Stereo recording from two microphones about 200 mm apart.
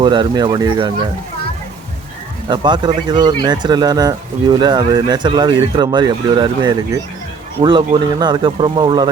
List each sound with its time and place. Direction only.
0.0 s speech: 20° right (ahead or behind)
2.5 s speech: 20° right (ahead or behind)